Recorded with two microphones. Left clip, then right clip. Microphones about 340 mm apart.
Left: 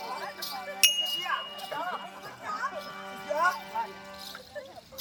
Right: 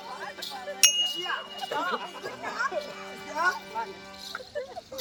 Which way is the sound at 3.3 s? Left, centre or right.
Centre.